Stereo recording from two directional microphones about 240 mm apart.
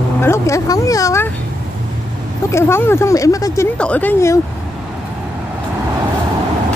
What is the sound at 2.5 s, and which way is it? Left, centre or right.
Speech, centre.